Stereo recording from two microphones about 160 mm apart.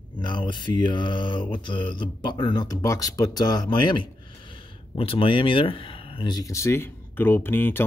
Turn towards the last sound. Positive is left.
turn(degrees=15)  # may be behind; listen again after turning